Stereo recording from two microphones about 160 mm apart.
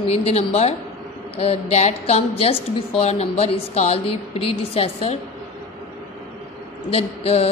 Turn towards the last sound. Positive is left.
turn(degrees=40)  # may be behind; listen again after turning